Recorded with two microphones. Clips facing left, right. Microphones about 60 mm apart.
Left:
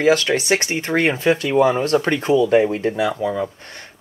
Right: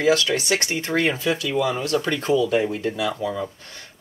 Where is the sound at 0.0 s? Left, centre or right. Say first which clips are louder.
Left 3 dB; left.